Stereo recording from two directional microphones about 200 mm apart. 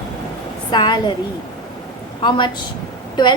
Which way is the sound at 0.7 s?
20° left (ahead or behind).